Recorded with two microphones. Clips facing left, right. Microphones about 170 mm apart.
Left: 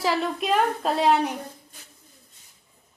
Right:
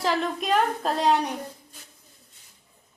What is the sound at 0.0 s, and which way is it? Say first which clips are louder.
A woman's voice: left 1 dB; centre (ahead or behind).